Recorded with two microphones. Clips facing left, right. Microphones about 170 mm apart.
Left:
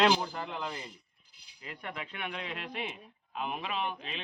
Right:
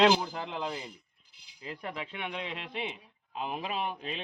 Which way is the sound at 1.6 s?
30° right (ahead or behind).